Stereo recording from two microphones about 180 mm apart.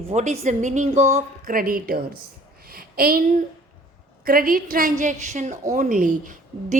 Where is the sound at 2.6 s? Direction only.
55° right (ahead or behind).